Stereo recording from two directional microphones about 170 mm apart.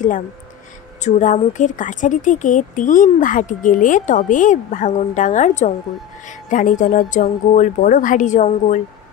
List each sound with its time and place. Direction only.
1.0 s speech: 45° left (ahead or behind)